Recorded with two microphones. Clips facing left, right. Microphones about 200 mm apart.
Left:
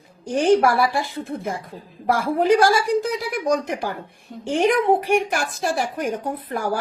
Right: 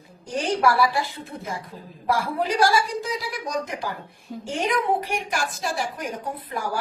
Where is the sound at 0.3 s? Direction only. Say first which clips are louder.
Left 6 dB; 55° left (ahead or behind).